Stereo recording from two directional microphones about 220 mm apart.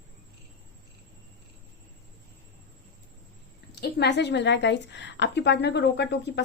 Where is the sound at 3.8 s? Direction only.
50° left (ahead or behind).